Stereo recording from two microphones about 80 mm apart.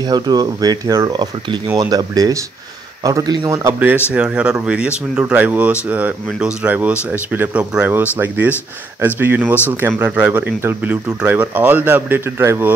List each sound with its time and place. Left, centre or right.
0.0 s speech: right
1.1 s a man's voice: right
4.1 s speech: centre
10.9 s speech: centre